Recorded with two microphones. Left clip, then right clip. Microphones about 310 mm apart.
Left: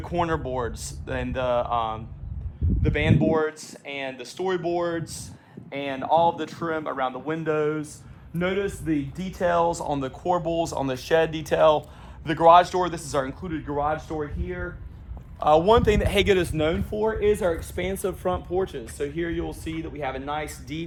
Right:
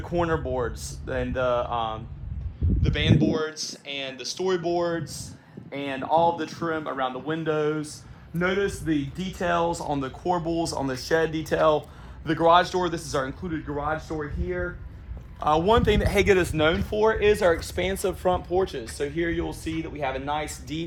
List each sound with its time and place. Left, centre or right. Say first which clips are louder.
0.0 s a man's voice: even; left
6.6 s speech: left 1 dB; centre
9.4 s speech: left 3 dB; centre
9.6 s a man's voice: left 2 dB; left
16.0 s a man's voice: even; centre; by 20.8 s right